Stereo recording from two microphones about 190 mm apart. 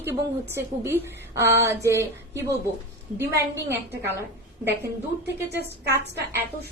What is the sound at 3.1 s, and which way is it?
Speech, 15° right (ahead or behind).